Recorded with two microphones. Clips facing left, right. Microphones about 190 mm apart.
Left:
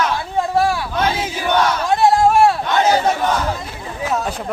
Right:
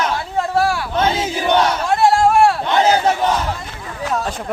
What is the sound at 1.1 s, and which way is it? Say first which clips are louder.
Battle cry: right 2 dB; 25° right (ahead or behind).